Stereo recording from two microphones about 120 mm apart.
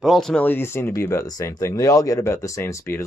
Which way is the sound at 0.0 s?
Centre (ahead or behind).